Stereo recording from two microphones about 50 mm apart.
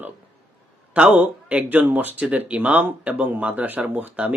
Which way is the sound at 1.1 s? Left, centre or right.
Right.